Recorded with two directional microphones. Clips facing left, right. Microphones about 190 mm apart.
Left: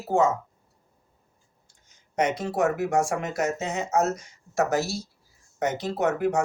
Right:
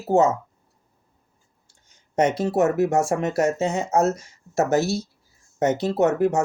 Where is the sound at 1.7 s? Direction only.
25° right (ahead or behind).